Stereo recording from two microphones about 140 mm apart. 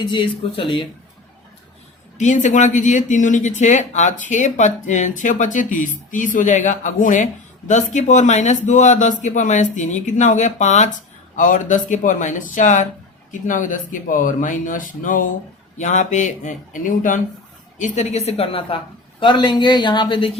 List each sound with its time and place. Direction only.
0.0 s speech: 35° left (ahead or behind)
2.1 s speech: 60° left (ahead or behind)
15.8 s a woman's voice: 60° left (ahead or behind); by 20.3 s 40° left (ahead or behind)